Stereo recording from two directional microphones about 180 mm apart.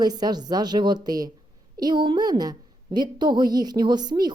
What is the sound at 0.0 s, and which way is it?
A woman's voice, 20° right (ahead or behind).